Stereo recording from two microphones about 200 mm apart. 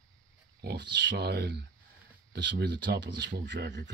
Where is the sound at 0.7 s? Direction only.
60° right (ahead or behind).